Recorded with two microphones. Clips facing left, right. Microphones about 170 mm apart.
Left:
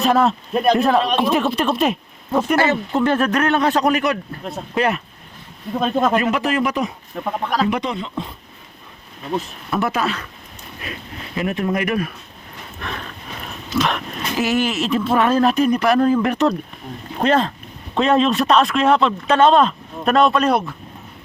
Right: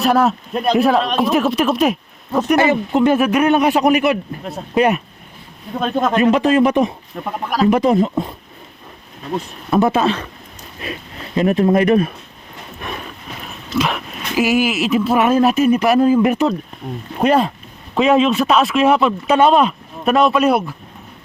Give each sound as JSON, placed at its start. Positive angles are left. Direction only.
{"t": 0.0, "sound": "speech", "side_deg": -5}
{"t": 2.6, "sound": "speech", "side_deg": -15}
{"t": 5.8, "sound": "speech", "side_deg": 5}
{"t": 6.1, "sound": "speech", "side_deg": -25}
{"t": 7.1, "sound": "speech", "side_deg": 0}
{"t": 7.7, "sound": "speech", "side_deg": -45}
{"t": 9.6, "sound": "speech", "side_deg": -25}
{"t": 11.3, "sound": "speech", "side_deg": -30}
{"t": 12.8, "sound": "speech", "side_deg": -15}
{"t": 13.7, "sound": "speech", "side_deg": -5}